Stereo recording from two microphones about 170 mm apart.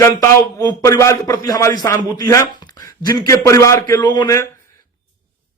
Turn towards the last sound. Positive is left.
turn(degrees=20)  # may be behind; listen again after turning